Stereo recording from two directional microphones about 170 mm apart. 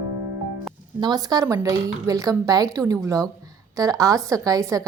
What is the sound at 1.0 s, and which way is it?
A woman's voice, 25° right (ahead or behind).